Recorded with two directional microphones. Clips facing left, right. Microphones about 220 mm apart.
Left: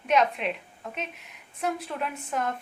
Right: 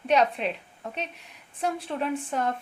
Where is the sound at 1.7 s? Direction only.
30° right (ahead or behind).